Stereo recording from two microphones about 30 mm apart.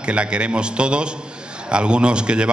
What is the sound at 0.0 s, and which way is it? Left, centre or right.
A man's voice, right.